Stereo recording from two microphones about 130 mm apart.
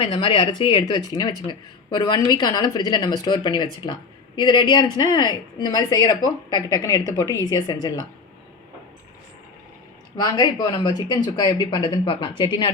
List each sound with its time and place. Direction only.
0.0 s speech: 40° left (ahead or behind)
10.2 s speech: 30° left (ahead or behind)